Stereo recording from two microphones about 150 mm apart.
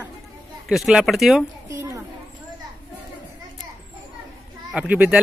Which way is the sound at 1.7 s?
20° right (ahead or behind).